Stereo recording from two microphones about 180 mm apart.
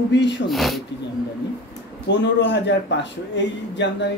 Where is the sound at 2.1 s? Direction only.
80° left.